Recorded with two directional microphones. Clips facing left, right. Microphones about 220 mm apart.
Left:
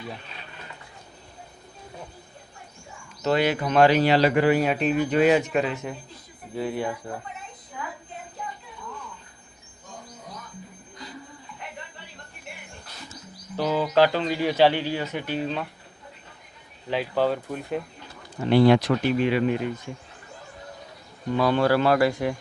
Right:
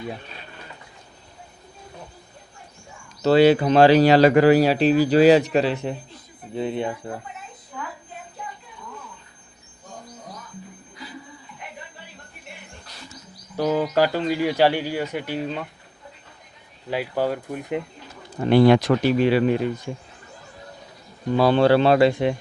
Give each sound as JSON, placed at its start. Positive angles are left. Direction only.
{"t": 3.2, "sound": "a man's voice", "side_deg": -30}
{"t": 13.6, "sound": "speech", "side_deg": -15}
{"t": 16.9, "sound": "speech", "side_deg": -10}
{"t": 18.5, "sound": "speech", "side_deg": -50}
{"t": 19.0, "sound": "a man's voice", "side_deg": -35}
{"t": 21.3, "sound": "speech", "side_deg": -30}